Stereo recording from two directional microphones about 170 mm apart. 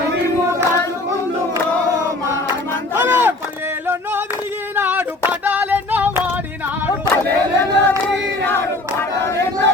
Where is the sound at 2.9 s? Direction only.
10° right (ahead or behind).